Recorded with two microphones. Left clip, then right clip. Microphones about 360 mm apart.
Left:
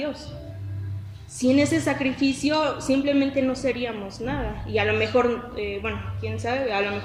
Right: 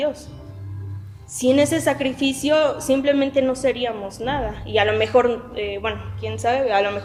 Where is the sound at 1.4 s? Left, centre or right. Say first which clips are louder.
Right 4 dB; right.